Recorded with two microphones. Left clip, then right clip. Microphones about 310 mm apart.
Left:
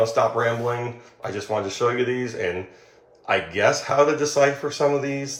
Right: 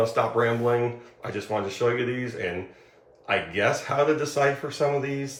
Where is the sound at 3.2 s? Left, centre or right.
Centre.